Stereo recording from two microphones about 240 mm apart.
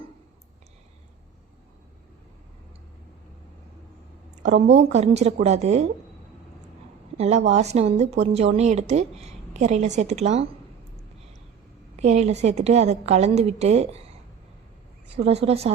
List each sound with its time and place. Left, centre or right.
4.8 s a woman's voice: right
7.2 s a woman's voice: right
11.9 s a woman's voice: right
15.1 s a woman's voice: right